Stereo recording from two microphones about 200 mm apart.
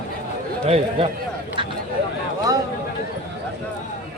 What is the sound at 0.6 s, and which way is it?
Speech, 30° right (ahead or behind).